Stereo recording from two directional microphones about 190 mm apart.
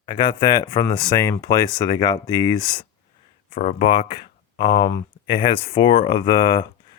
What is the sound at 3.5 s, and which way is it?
Speech, 40° left (ahead or behind).